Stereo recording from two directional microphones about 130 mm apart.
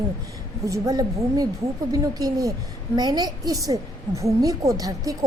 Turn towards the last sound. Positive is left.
turn(degrees=-25)  # may be behind; listen again after turning